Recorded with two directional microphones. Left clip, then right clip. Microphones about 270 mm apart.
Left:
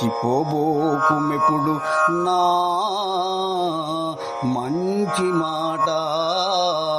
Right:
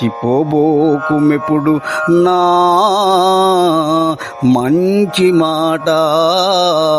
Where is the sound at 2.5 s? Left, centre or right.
Right.